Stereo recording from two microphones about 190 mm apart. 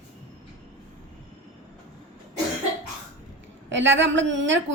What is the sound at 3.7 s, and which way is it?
Speech, 75° right (ahead or behind).